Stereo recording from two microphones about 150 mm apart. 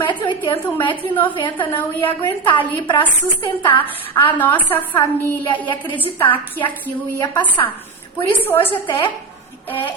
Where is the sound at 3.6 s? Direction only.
10° left (ahead or behind).